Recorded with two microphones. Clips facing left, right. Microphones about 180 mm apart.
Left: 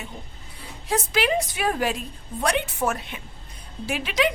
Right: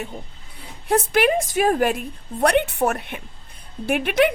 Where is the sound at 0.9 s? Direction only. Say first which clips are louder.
Right 5 dB; 55° right (ahead or behind).